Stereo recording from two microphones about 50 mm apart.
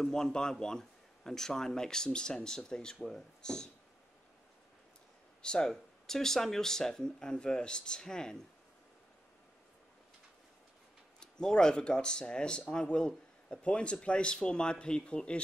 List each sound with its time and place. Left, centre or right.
0.0 s a man's voice: centre
5.4 s a man's voice: centre
11.1 s a man's voice: centre